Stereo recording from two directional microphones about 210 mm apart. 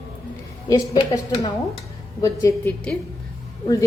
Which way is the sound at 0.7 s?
20° left (ahead or behind).